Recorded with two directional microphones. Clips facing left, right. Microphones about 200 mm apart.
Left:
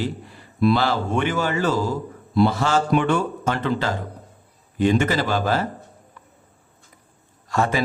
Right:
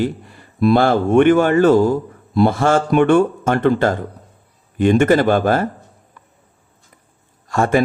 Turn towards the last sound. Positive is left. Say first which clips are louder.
# right 6 dB
turn(degrees=-50)  # may be behind; listen again after turning